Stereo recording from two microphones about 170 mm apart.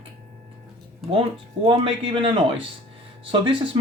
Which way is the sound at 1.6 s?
30° right (ahead or behind).